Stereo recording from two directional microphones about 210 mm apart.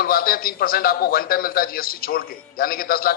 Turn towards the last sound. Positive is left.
turn(degrees=45)  # may be behind; listen again after turning